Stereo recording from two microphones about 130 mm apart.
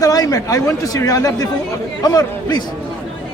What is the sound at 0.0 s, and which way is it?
Speech, 30° left (ahead or behind).